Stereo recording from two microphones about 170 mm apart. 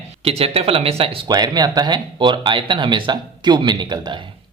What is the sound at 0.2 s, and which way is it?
Speech, 35° right (ahead or behind).